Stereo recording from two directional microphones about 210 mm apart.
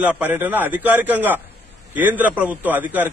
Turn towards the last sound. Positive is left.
turn(degrees=-10)  # may be behind; listen again after turning